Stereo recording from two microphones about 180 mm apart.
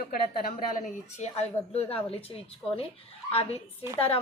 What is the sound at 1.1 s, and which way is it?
A woman's voice, 35° left (ahead or behind).